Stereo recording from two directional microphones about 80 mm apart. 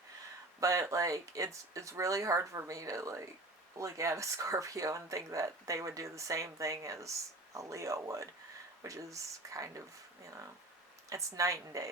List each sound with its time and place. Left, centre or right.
0.6 s speech: right
11.1 s speech: right